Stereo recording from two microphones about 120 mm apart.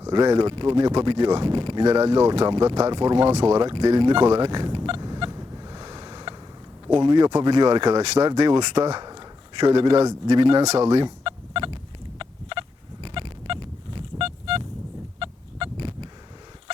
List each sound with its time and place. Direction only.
0.1 s speech: 35° right (ahead or behind)
2.2 s speech: 55° right (ahead or behind)
3.9 s fowl: 45° right (ahead or behind)
6.8 s speech: 40° right (ahead or behind)
7.9 s speech: 60° right (ahead or behind)
8.3 s speech: 35° right (ahead or behind)
8.7 s speech: 50° right (ahead or behind)
9.0 s a sound: 35° right (ahead or behind)
9.9 s a man's voice: 30° right (ahead or behind)
10.2 s speech: 45° right (ahead or behind)
10.6 s speech: 65° right (ahead or behind)
11.0 s fowl: 45° right (ahead or behind)
15.2 s a sound: 45° right (ahead or behind)